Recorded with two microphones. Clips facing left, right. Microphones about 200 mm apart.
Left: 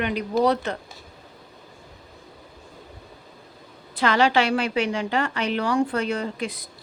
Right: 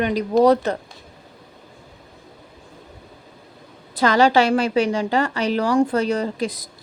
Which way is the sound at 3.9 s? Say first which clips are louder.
Right 4 dB; 40° right (ahead or behind).